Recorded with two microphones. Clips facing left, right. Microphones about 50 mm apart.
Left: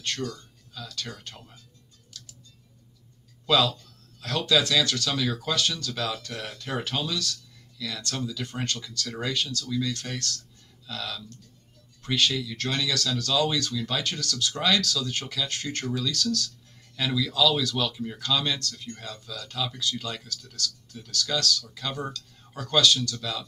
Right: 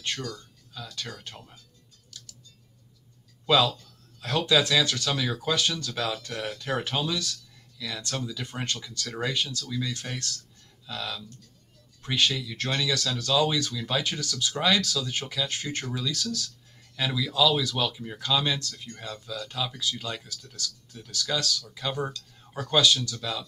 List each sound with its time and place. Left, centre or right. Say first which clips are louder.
0.7 s speech: left 1 dB; centre
3.4 s speech: right 1 dB; centre